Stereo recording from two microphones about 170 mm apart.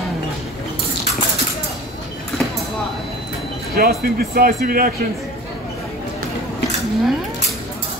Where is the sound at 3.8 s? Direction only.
65° right (ahead or behind).